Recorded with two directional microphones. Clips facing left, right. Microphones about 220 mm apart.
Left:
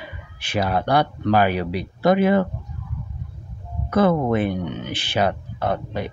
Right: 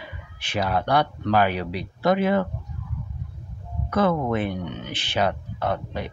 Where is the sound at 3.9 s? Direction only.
10° left (ahead or behind).